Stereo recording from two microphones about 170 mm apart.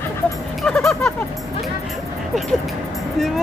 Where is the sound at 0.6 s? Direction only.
Centre (ahead or behind).